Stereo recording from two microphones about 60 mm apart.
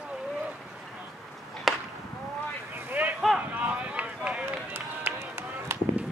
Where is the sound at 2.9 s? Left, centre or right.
Right.